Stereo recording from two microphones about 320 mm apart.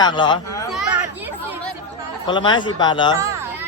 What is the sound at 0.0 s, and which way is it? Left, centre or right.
Speech, centre.